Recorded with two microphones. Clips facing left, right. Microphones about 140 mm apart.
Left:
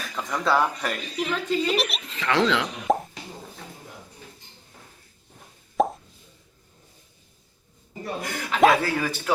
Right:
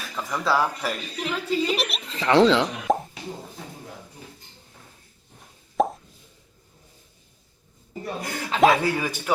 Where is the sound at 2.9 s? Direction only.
Centre (ahead or behind).